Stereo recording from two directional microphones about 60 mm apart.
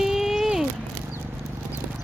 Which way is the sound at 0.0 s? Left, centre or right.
Centre.